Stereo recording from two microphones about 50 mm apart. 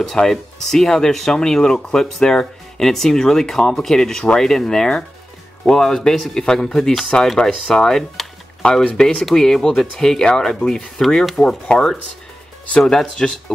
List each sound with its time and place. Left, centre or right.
0.0 s speech: centre